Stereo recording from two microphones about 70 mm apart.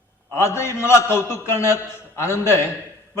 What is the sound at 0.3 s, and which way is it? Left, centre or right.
A man's voice, left.